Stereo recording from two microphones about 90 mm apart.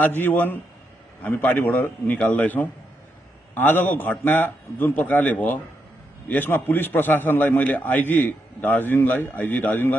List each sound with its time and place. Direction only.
0.0 s a man's voice: 20° left (ahead or behind)